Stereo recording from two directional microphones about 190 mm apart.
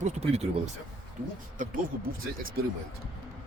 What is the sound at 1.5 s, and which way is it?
Speech, 45° right (ahead or behind).